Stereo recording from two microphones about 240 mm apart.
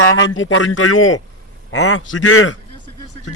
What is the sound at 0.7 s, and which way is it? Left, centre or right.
Speech, left.